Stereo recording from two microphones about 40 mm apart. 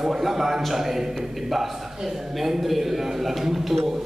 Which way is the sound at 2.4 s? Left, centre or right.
Centre.